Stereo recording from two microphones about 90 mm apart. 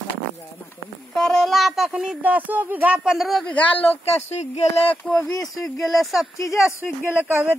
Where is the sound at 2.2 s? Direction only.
20° right (ahead or behind).